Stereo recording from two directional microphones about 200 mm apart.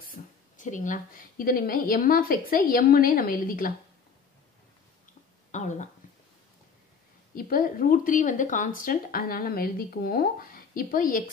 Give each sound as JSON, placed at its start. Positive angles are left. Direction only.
{"t": 0.1, "sound": "speech", "side_deg": 40}
{"t": 5.5, "sound": "a sound", "side_deg": 35}
{"t": 7.3, "sound": "speech", "side_deg": 45}